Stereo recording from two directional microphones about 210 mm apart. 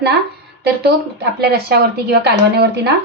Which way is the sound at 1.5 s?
50° right (ahead or behind).